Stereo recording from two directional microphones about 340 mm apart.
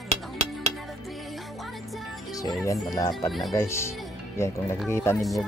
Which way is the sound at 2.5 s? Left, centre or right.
Centre.